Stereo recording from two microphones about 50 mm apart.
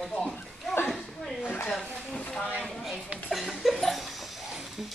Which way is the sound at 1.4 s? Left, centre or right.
Left.